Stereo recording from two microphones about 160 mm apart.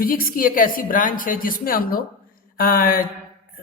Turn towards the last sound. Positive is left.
turn(degrees=65)  # may be behind; listen again after turning